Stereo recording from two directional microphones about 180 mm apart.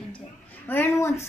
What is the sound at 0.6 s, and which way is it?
Speech, 10° left (ahead or behind).